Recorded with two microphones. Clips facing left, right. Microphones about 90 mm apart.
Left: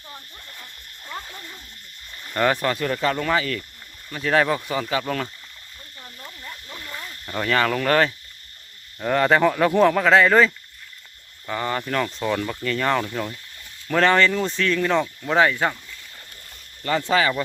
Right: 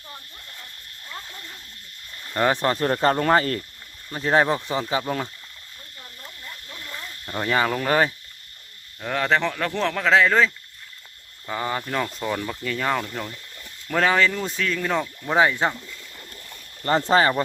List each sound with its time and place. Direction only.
0.6 s speech: 20° left (ahead or behind)
2.3 s speech: 20° right (ahead or behind)
2.6 s speech: 35° right (ahead or behind)
4.1 s speech: 25° right (ahead or behind)
6.0 s a sound: 15° left (ahead or behind)
7.3 s speech: 15° right (ahead or behind)
9.0 s speech: 5° left (ahead or behind)
11.4 s speech: 10° right (ahead or behind)
15.2 s speech: 15° right (ahead or behind)
16.8 s speech: 35° right (ahead or behind)